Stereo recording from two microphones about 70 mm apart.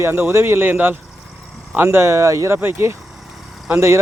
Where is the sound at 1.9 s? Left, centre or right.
Right.